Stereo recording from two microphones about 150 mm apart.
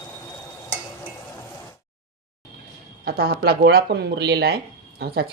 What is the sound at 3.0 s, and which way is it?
Speech, 90° right.